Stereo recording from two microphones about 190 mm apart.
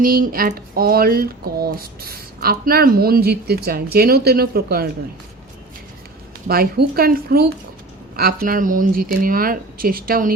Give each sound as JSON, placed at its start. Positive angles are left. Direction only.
{"t": 0.0, "sound": "speech", "side_deg": -50}
{"t": 6.5, "sound": "speech", "side_deg": -50}